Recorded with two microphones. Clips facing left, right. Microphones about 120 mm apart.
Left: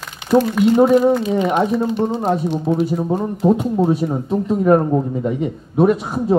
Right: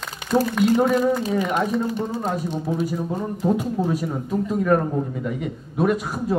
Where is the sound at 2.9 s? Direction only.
30° left (ahead or behind).